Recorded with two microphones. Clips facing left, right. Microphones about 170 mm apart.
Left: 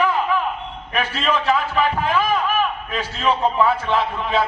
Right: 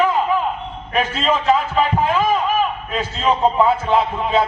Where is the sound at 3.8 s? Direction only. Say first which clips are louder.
Right 3 dB; 25° right (ahead or behind).